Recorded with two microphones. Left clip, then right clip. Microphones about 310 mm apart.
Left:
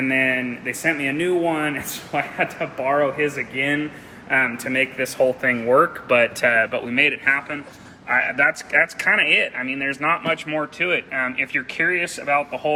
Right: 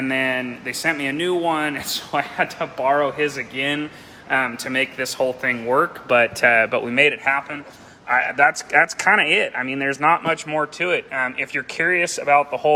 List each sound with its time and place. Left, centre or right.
0.0 s speech: centre; by 7.2 s right
7.3 s speech: centre